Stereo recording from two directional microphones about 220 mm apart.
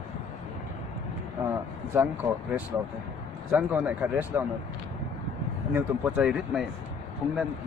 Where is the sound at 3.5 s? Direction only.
5° right (ahead or behind).